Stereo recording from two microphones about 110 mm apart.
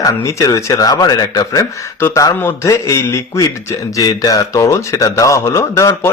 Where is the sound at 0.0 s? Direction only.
30° left (ahead or behind).